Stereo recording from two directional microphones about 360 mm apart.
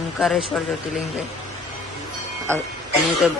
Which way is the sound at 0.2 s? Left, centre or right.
Centre.